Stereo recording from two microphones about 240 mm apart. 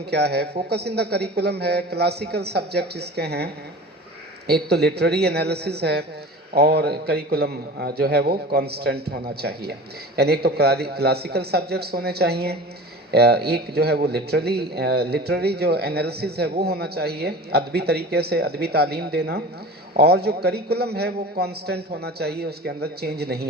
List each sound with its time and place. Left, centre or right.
0.1 s a man's voice: right